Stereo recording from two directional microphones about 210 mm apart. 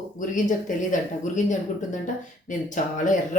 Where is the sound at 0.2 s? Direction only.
35° left (ahead or behind).